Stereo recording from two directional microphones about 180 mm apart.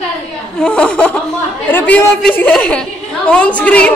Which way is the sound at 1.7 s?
10° left (ahead or behind).